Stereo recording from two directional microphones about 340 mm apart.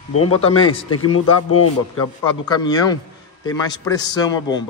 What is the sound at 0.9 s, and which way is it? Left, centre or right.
Speech, left.